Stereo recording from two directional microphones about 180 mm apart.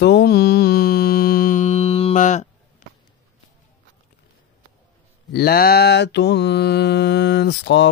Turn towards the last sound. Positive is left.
turn(degrees=80)